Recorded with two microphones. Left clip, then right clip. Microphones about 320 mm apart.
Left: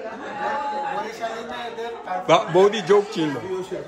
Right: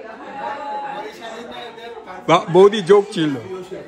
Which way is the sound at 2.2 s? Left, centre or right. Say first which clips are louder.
Right 4 dB; right.